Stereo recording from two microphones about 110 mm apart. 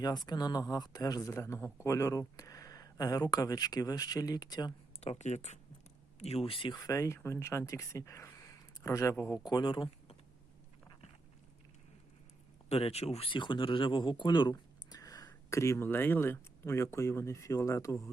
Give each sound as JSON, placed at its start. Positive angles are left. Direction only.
{"t": 0.3, "sound": "speech", "side_deg": 40}
{"t": 4.9, "sound": "speech", "side_deg": 85}
{"t": 6.1, "sound": "speech", "side_deg": 70}
{"t": 6.7, "sound": "speech", "side_deg": 30}
{"t": 9.4, "sound": "speech", "side_deg": 40}
{"t": 12.6, "sound": "speech", "side_deg": 65}